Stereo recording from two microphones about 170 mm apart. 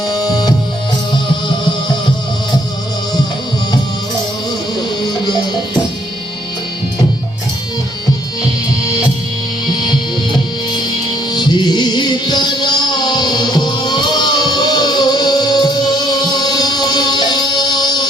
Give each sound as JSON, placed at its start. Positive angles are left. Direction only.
{"t": 0.1, "sound": "music", "side_deg": 25}
{"t": 8.8, "sound": "music", "side_deg": 20}